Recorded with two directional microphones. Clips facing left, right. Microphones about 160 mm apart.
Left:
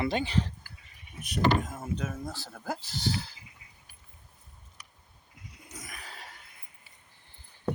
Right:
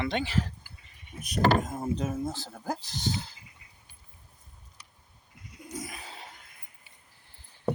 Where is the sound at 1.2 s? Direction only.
40° right (ahead or behind); by 3.3 s 20° right (ahead or behind).